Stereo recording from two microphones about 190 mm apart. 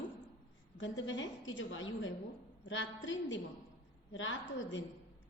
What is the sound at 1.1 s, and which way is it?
A woman's voice, 80° left.